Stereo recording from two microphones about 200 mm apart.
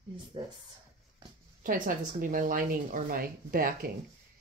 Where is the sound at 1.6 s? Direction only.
45° right (ahead or behind).